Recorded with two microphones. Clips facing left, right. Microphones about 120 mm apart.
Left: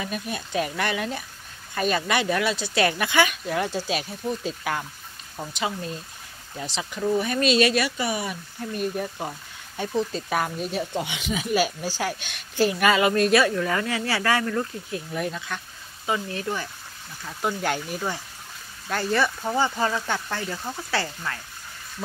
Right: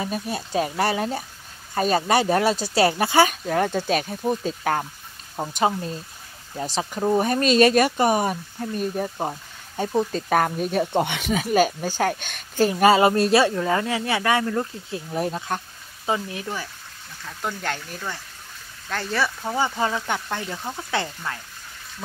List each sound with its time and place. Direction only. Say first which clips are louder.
0.0 s speech: right 3 dB; 35° right (ahead or behind)
16.1 s speech: right 1 dB; 15° right (ahead or behind)
17.2 s speech: left 3 dB; 10° left (ahead or behind)
19.5 s speech: right 1 dB; 15° right (ahead or behind)